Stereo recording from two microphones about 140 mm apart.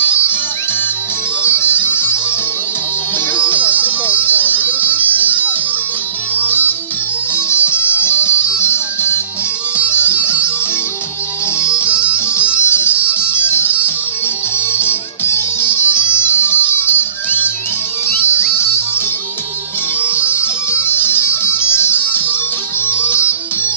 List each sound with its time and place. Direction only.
0.0 s music: 15° left (ahead or behind)
1.4 s music: 15° left (ahead or behind)
3.6 s music: 15° left (ahead or behind)
11.9 s music: 10° right (ahead or behind)
13.5 s music: 15° left (ahead or behind)
20.8 s music: 15° left (ahead or behind)